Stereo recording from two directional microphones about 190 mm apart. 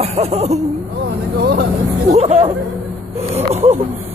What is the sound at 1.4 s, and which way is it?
Speech, 60° right (ahead or behind).